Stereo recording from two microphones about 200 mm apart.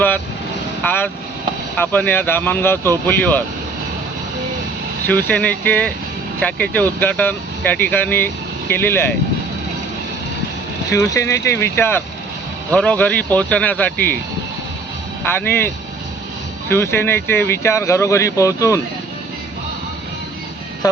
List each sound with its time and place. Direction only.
0.9 s speech: 10° left (ahead or behind)
5.0 s speech: 10° left (ahead or behind)
10.9 s speech: 15° left (ahead or behind)
15.3 s speech: 10° left (ahead or behind)
20.8 s speech: 20° left (ahead or behind)